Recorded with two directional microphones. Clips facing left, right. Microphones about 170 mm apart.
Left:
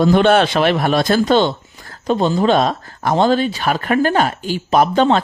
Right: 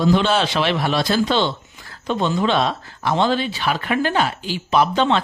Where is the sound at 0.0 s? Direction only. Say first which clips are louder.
Left 5 dB; 55° left (ahead or behind).